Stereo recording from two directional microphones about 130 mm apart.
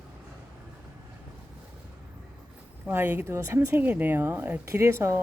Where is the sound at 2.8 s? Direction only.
15° right (ahead or behind).